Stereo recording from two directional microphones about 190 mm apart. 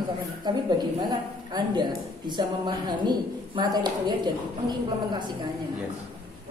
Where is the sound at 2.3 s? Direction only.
25° right (ahead or behind).